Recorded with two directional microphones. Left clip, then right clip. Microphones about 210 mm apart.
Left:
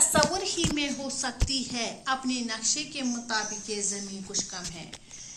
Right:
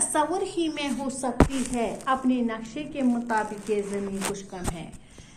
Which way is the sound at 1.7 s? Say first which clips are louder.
Right 8 dB; 25° left (ahead or behind).